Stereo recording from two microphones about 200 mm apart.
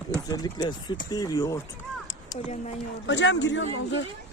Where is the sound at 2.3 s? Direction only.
35° left (ahead or behind).